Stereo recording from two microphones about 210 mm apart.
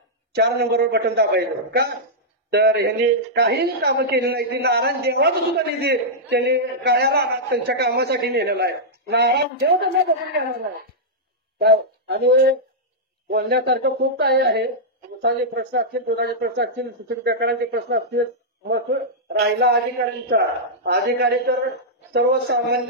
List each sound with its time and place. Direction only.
0.3 s speech: 50° right (ahead or behind)
11.5 s speech: 50° right (ahead or behind)